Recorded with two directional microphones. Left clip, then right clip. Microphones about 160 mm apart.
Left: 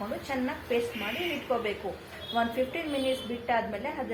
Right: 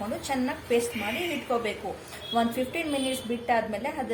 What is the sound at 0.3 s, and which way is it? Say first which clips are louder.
Speech: right 4 dB; 25° right (ahead or behind).